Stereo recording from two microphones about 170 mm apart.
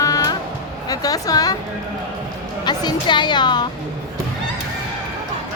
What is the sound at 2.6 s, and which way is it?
A woman's voice, 25° left (ahead or behind).